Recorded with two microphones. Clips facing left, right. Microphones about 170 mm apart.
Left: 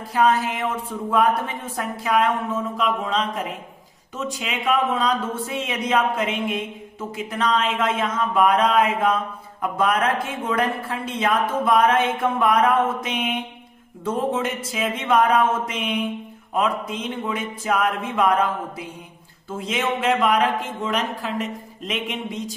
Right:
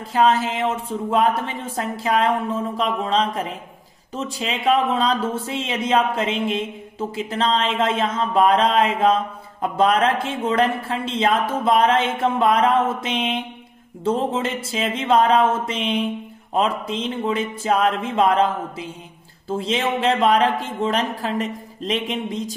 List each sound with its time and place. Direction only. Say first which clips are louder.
0.1 s speech: right 2 dB; 25° right (ahead or behind)